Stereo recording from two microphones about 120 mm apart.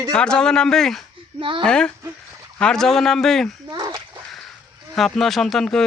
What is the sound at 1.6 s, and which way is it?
Speech, 5° left (ahead or behind).